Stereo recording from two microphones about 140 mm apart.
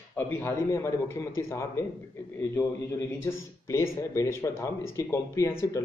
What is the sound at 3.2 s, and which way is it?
Speech, 20° left (ahead or behind).